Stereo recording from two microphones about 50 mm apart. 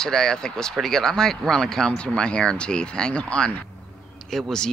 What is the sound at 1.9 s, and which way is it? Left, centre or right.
Speech, centre.